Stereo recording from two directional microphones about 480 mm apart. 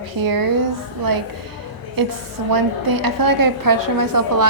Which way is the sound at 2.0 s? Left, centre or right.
Right.